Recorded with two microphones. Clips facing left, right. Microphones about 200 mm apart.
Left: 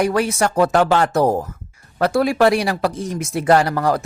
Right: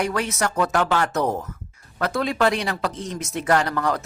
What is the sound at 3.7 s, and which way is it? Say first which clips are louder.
Speech: left 5 dB; 35° left (ahead or behind).